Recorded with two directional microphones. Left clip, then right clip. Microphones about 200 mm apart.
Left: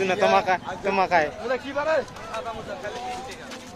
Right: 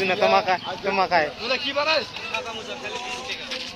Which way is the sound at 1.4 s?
35° left (ahead or behind).